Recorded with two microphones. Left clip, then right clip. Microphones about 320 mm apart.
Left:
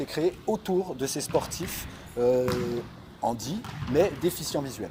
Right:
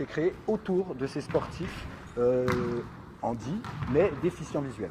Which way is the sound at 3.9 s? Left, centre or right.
Left.